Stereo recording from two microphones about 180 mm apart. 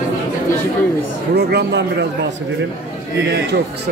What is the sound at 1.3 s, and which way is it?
Speech, 65° right (ahead or behind).